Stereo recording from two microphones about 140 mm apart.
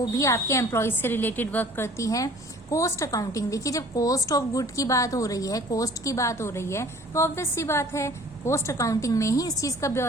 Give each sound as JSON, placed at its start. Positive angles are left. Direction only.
{"t": 0.0, "sound": "a woman's voice", "side_deg": 25}